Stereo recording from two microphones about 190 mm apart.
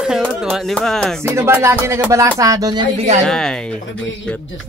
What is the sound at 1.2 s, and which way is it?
Music, 10° right (ahead or behind).